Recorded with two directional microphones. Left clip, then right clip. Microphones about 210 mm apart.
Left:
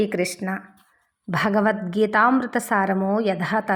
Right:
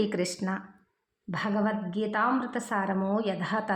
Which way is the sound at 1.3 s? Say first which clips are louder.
Left 9 dB; 20° left (ahead or behind).